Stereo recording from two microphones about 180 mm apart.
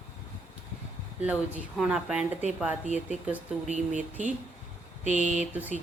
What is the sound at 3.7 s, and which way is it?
Speech, 45° right (ahead or behind).